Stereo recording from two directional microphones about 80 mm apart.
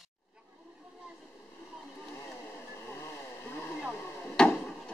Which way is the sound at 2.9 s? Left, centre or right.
Left.